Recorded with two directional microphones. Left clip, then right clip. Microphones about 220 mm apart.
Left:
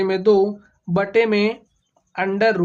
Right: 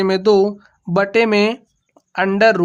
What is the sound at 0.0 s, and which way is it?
Speech, 45° right (ahead or behind).